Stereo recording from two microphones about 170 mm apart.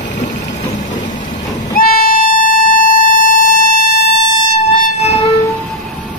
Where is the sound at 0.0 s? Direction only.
45° left (ahead or behind).